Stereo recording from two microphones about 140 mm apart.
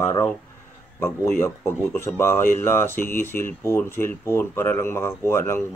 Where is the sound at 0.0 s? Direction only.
20° left (ahead or behind).